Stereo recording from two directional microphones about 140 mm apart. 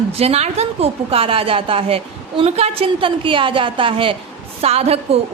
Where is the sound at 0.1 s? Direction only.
45° right (ahead or behind).